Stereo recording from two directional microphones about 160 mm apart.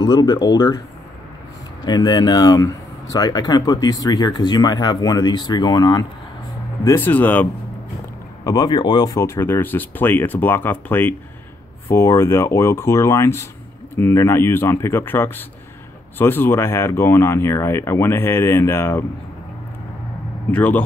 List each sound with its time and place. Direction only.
0.0 s speech: 25° left (ahead or behind)
1.9 s speech: 25° left (ahead or behind)
6.8 s speech: 15° left (ahead or behind)
8.5 s speech: 25° left (ahead or behind)
20.5 s speech: 10° left (ahead or behind)